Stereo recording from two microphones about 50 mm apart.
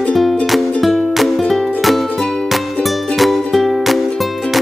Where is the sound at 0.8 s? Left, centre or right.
Centre.